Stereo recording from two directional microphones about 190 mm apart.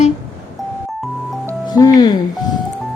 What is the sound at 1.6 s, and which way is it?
Speech, 20° left (ahead or behind).